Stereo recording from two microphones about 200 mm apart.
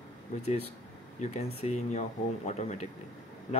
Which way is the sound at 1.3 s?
35° left (ahead or behind).